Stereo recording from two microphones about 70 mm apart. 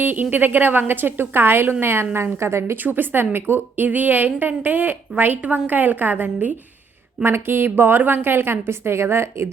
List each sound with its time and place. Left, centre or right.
0.0 s a woman's voice: right
2.8 s a woman's voice: right